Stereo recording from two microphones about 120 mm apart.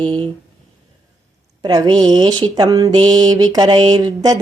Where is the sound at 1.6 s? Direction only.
35° right (ahead or behind).